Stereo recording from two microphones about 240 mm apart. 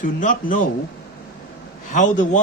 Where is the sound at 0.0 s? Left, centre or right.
Left.